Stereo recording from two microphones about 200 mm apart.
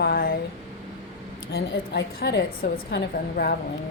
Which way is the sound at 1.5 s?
60° left (ahead or behind).